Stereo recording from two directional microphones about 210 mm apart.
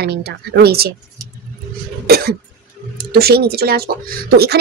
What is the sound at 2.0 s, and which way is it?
Cough, 50° right (ahead or behind).